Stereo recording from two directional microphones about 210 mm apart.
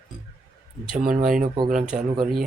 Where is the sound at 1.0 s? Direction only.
40° right (ahead or behind).